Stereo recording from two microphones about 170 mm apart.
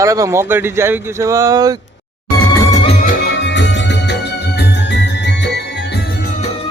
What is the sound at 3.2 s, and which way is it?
Music, 90° left.